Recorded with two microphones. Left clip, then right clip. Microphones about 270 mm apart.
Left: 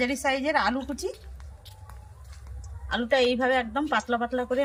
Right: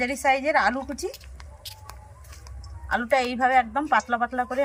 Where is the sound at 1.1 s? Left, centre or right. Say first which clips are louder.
Right 4 dB; right.